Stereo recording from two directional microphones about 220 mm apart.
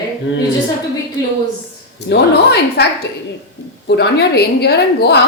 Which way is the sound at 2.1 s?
50° left (ahead or behind).